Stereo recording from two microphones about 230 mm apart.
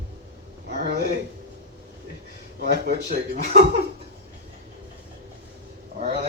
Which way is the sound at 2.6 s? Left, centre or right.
Right.